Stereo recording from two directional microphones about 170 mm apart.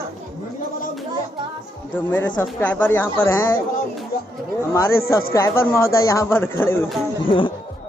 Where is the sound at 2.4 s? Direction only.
10° left (ahead or behind).